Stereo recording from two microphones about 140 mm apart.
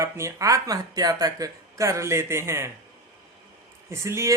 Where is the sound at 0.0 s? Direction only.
20° right (ahead or behind).